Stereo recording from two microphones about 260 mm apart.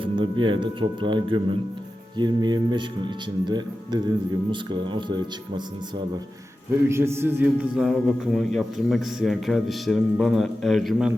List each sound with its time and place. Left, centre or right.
0.0 s speech: centre
6.8 s a man's voice: centre